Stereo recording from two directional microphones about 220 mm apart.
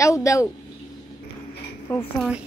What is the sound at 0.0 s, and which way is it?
Speech, 15° left (ahead or behind).